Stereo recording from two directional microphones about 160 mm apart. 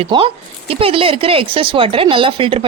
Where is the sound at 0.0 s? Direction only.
35° right (ahead or behind).